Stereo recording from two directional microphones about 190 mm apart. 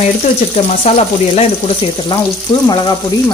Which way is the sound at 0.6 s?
35° left (ahead or behind).